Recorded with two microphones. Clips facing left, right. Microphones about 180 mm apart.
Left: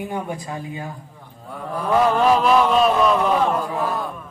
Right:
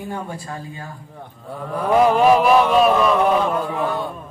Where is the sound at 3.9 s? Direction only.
30° right (ahead or behind).